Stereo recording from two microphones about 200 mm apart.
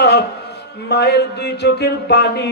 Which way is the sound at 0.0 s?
55° left (ahead or behind).